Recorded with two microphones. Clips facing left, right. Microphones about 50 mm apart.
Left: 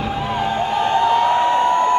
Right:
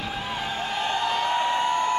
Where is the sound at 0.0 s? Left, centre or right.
Centre.